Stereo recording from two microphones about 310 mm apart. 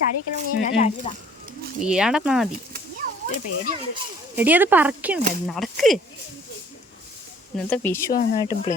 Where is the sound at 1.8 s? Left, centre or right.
Centre.